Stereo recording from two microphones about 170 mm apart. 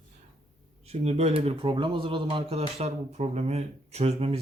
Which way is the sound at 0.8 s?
40° right (ahead or behind).